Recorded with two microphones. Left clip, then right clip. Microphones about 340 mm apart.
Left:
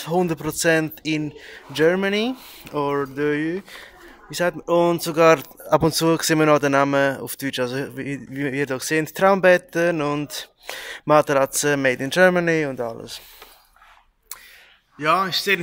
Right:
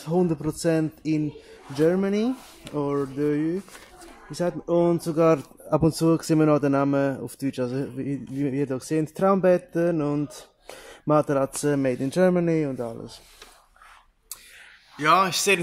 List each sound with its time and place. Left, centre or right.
0.0 s speech: left
15.0 s a man's voice: centre